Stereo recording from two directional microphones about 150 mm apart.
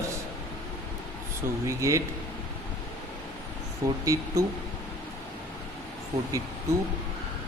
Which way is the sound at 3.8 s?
20° right (ahead or behind).